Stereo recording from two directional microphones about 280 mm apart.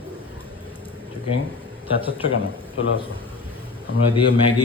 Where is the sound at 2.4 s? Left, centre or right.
Left.